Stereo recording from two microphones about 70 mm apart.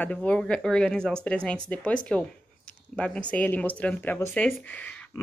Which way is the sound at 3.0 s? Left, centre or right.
Centre.